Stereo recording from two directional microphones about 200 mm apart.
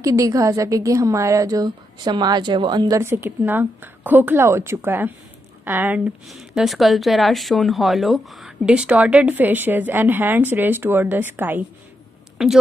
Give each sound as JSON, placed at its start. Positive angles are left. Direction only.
{"t": 0.0, "sound": "speech", "side_deg": -15}